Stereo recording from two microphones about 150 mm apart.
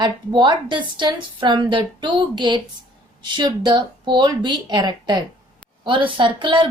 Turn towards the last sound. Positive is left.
turn(degrees=-35)  # may be behind; listen again after turning